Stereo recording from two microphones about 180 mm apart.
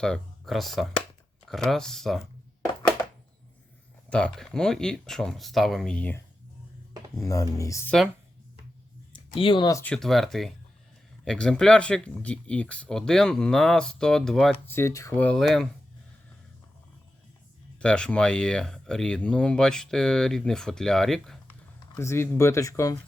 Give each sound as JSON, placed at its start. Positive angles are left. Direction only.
{"t": 0.0, "sound": "speech", "side_deg": 0}
{"t": 4.1, "sound": "speech", "side_deg": 5}
{"t": 7.3, "sound": "speech", "side_deg": 20}
{"t": 9.1, "sound": "speech", "side_deg": 30}
{"t": 9.8, "sound": "speech", "side_deg": 5}
{"t": 14.8, "sound": "speech", "side_deg": 15}
{"t": 17.7, "sound": "speech", "side_deg": 5}
{"t": 21.9, "sound": "speech", "side_deg": 15}